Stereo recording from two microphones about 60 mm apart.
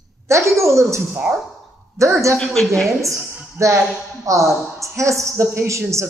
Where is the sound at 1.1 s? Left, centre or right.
Centre.